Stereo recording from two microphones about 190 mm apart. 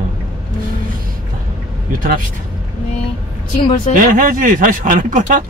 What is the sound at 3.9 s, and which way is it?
Speech, 45° right (ahead or behind).